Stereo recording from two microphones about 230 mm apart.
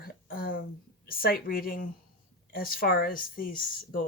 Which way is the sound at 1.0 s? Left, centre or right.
Left.